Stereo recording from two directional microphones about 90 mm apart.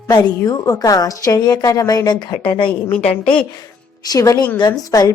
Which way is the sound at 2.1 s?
60° left (ahead or behind).